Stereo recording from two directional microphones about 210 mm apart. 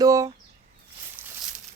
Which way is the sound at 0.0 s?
15° right (ahead or behind).